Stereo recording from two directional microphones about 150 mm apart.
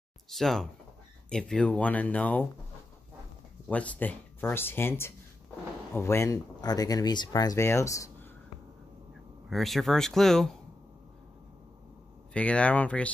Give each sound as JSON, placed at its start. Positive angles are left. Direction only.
{"t": 0.3, "sound": "speech", "side_deg": 0}
{"t": 3.6, "sound": "speech", "side_deg": 10}
{"t": 9.5, "sound": "speech", "side_deg": 0}
{"t": 12.4, "sound": "speech", "side_deg": 10}